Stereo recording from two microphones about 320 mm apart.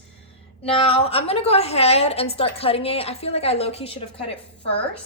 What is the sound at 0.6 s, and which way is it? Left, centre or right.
A woman's voice, centre.